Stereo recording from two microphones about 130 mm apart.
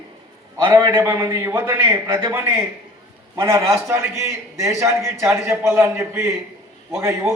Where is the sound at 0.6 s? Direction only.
20° right (ahead or behind).